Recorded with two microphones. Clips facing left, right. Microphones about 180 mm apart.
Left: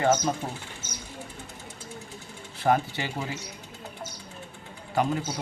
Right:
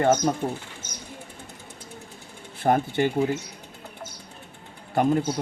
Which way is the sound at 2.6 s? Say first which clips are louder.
Right 3 dB; 50° right (ahead or behind).